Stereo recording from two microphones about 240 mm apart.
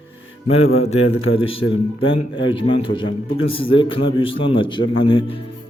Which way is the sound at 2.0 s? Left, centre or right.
Left.